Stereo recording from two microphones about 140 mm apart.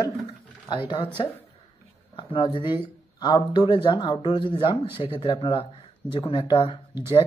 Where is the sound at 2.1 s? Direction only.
35° left (ahead or behind).